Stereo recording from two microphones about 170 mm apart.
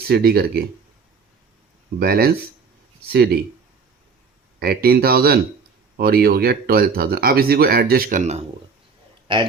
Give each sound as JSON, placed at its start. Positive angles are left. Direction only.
{"t": 0.1, "sound": "speech", "side_deg": -65}
{"t": 2.0, "sound": "speech", "side_deg": -65}
{"t": 4.6, "sound": "speech", "side_deg": -65}
{"t": 9.2, "sound": "speech", "side_deg": -30}